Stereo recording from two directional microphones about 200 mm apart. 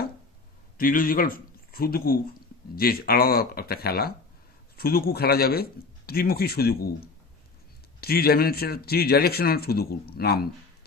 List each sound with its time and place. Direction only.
0.7 s a man's voice: 45° left (ahead or behind)
8.0 s a man's voice: 50° left (ahead or behind)